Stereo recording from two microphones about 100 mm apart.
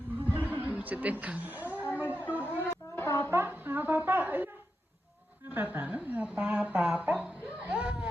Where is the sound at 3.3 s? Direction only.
20° right (ahead or behind).